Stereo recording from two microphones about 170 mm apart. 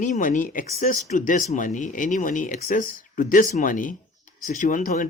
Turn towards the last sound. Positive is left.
turn(degrees=50)  # may be behind; listen again after turning